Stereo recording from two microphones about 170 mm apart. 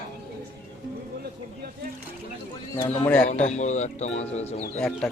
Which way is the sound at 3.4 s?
45° left (ahead or behind).